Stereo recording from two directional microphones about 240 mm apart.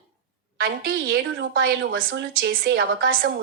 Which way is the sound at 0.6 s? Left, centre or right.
Right.